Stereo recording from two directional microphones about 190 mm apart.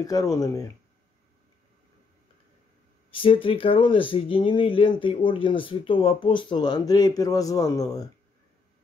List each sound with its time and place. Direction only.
0.0 s speech: 20° left (ahead or behind)
3.1 s speech: 30° left (ahead or behind)